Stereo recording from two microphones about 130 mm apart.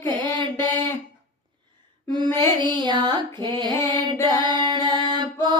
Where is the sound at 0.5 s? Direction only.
20° left (ahead or behind).